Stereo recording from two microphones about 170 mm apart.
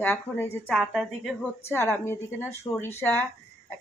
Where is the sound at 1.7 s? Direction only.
15° left (ahead or behind).